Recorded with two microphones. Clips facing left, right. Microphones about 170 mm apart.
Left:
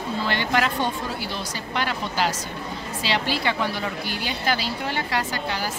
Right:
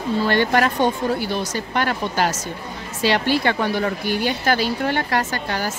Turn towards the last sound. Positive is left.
turn(degrees=-50)  # may be behind; listen again after turning